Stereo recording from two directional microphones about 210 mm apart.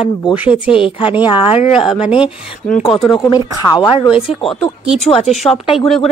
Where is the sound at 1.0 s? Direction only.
10° right (ahead or behind).